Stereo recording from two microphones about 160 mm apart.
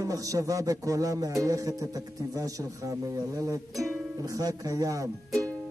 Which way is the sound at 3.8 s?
20° right (ahead or behind).